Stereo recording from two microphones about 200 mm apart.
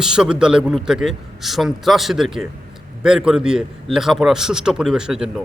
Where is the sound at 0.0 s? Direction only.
5° right (ahead or behind).